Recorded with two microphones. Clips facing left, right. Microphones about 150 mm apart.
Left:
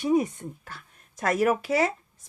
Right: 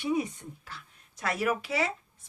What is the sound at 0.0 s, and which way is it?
A woman's voice, 45° left (ahead or behind).